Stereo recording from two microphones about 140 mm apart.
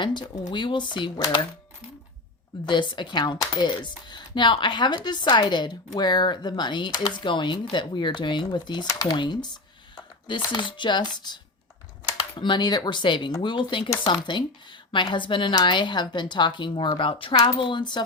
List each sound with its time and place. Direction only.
0.0 s speech: 30° left (ahead or behind)
2.5 s speech: 35° left (ahead or behind)
12.4 s speech: 30° left (ahead or behind)